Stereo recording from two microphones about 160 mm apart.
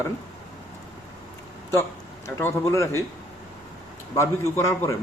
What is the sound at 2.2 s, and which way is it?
Speech, 15° left (ahead or behind).